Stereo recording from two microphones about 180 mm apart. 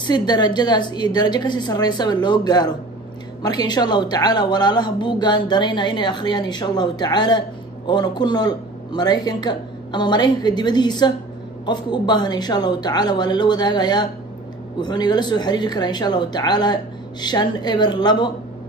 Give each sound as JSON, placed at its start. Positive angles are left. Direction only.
{"t": 0.0, "sound": "speech", "side_deg": 25}